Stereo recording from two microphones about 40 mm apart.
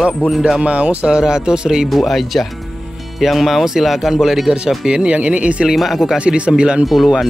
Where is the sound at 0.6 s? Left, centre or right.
Right.